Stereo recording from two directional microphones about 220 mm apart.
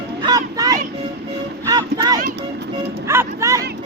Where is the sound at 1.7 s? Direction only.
15° right (ahead or behind).